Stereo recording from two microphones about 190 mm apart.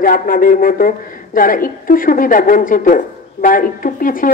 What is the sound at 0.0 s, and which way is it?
A woman's voice, 50° left (ahead or behind).